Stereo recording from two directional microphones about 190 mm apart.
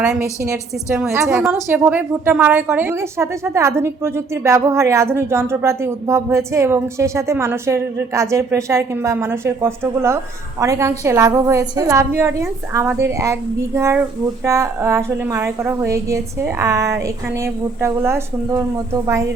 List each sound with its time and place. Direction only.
0.1 s a woman's voice: 15° right (ahead or behind)